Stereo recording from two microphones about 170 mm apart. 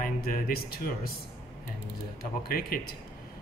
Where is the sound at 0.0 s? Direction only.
55° left (ahead or behind).